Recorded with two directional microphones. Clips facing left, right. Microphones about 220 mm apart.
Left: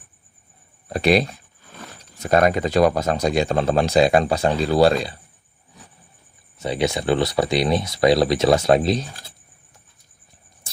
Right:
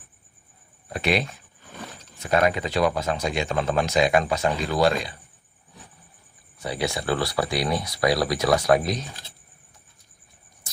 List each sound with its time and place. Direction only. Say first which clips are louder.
0.9 s speech: left 7 dB; 35° left (ahead or behind)
6.6 s speech: left 5 dB; 20° left (ahead or behind)